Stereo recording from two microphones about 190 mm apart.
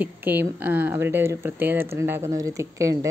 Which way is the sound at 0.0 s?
10° right (ahead or behind).